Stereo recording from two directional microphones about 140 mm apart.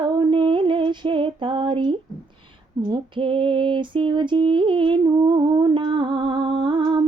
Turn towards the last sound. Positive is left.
turn(degrees=-30)  # may be behind; listen again after turning